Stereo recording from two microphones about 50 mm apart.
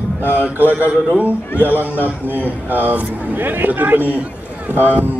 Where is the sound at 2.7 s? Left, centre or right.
Right.